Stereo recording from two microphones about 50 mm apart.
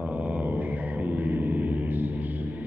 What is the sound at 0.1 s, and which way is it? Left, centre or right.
Music, right.